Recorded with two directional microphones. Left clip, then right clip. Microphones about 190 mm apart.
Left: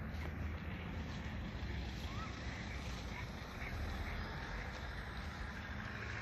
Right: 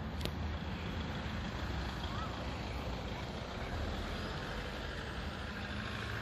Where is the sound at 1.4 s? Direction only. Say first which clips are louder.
Right 7 dB; 35° right (ahead or behind).